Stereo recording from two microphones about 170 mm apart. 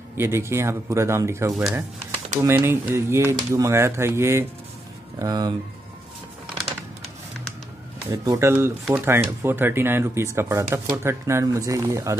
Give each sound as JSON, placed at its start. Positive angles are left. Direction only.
{"t": 0.2, "sound": "speech", "side_deg": -15}
{"t": 1.5, "sound": "speech", "side_deg": 0}
{"t": 2.4, "sound": "speech", "side_deg": -15}
{"t": 8.1, "sound": "speech", "side_deg": -15}